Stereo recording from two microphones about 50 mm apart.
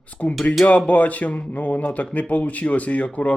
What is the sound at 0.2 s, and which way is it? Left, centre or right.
Speech, left.